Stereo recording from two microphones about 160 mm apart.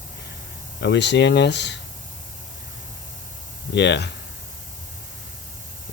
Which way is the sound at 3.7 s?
90° left.